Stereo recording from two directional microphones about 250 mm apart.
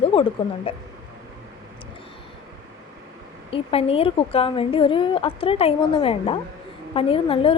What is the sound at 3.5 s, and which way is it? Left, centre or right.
A woman's voice, left.